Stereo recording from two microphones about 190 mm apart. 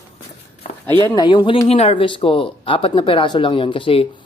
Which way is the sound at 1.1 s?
25° left (ahead or behind).